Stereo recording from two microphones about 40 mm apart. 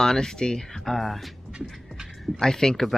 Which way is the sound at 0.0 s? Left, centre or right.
Centre.